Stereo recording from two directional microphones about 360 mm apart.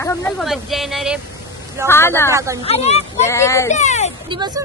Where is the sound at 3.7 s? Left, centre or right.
Centre.